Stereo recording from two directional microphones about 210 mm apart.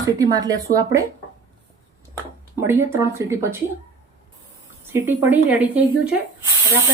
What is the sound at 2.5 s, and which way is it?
Speech, 10° right (ahead or behind).